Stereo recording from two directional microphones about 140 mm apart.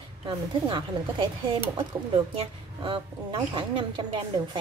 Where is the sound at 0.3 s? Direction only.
35° right (ahead or behind).